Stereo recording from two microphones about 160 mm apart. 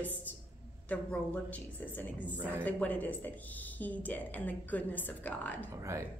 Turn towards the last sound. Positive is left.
turn(degrees=-20)  # may be behind; listen again after turning